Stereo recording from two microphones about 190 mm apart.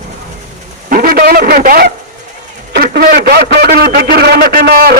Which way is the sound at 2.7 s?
50° right (ahead or behind).